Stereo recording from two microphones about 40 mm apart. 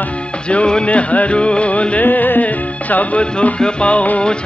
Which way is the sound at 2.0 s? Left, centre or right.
Left.